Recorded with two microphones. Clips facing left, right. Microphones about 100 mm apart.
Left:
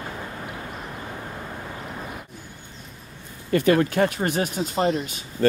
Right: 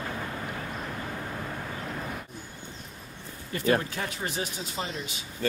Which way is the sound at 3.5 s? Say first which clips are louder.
Left 7 dB; 65° left (ahead or behind).